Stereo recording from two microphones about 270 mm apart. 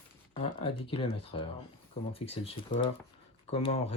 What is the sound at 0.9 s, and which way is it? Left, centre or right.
Speech, centre.